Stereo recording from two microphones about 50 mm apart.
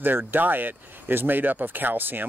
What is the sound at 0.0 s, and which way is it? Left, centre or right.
Speech, right.